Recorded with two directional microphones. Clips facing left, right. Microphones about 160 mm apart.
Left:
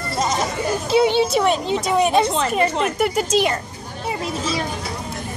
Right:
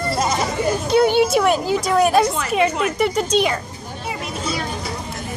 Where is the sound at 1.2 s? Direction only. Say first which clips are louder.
Right 1 dB; centre (ahead or behind).